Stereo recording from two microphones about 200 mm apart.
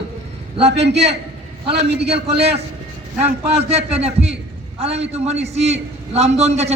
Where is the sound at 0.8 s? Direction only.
60° right (ahead or behind).